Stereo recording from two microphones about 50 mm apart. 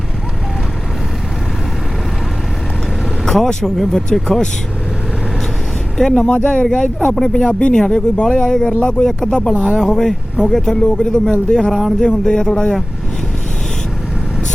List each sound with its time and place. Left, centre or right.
3.2 s speech: centre
6.0 s speech: centre
10.7 s speech: centre
11.5 s speech: centre
11.9 s speech: centre